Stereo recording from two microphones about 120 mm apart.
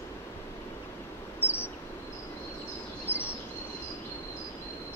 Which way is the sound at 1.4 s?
20° left (ahead or behind).